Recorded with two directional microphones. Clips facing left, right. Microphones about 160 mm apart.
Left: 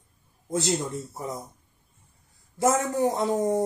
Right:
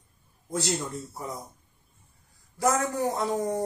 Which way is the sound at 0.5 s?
20° left (ahead or behind).